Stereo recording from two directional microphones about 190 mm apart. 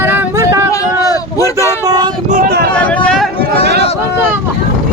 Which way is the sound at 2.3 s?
55° right (ahead or behind).